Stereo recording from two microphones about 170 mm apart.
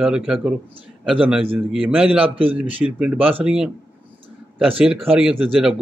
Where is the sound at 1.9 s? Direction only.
5° right (ahead or behind).